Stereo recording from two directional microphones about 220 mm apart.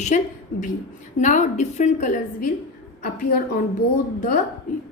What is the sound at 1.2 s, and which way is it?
Speech, 35° left (ahead or behind).